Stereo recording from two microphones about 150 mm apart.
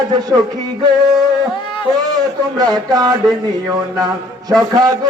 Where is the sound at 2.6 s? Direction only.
25° right (ahead or behind).